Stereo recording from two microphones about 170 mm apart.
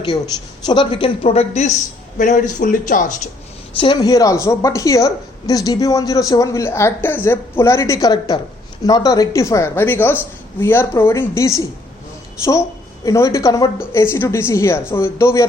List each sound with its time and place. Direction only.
0.6 s speech: 25° left (ahead or behind); by 3.2 s 50° left (ahead or behind)
3.8 s a woman's voice: 25° left (ahead or behind)
13.1 s a woman's voice: 20° left (ahead or behind)